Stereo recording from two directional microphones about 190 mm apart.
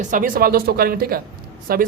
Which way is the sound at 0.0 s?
45° right (ahead or behind).